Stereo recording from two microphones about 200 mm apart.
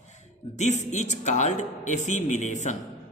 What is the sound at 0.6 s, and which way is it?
A woman's voice, 35° left (ahead or behind).